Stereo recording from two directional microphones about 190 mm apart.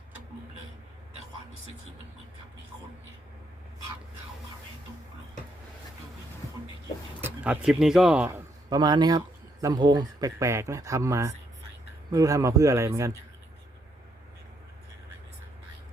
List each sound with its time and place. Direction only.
7.2 s speech: 10° right (ahead or behind)
8.7 s speech: 20° right (ahead or behind)